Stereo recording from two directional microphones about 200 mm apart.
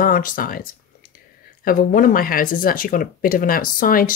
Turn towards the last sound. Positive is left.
turn(degrees=45)  # may be behind; listen again after turning